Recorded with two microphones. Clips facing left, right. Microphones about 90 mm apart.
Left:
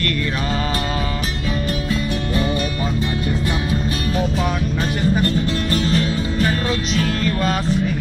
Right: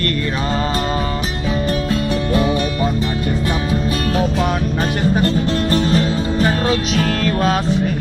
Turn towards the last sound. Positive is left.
turn(degrees=-75)  # may be behind; listen again after turning